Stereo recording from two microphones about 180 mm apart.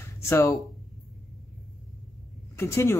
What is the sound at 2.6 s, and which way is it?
Speech, 15° left (ahead or behind).